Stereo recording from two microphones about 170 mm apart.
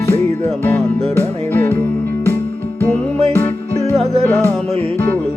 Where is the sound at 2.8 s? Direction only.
10° left (ahead or behind).